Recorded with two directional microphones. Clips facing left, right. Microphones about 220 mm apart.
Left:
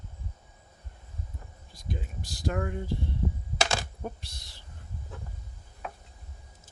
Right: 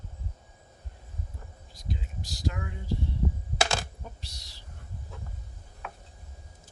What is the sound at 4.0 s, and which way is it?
Speech, 55° left (ahead or behind).